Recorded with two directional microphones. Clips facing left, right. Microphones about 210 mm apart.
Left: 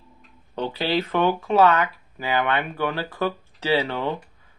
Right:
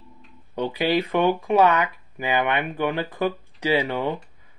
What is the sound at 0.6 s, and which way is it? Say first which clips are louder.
Speech: right 2 dB; 15° right (ahead or behind).